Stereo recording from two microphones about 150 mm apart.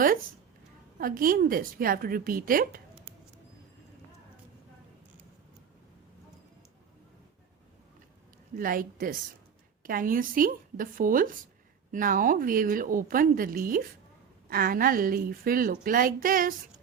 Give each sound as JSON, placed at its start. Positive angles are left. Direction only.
{"t": 0.9, "sound": "a woman's voice", "side_deg": -70}
{"t": 8.5, "sound": "a woman's voice", "side_deg": -70}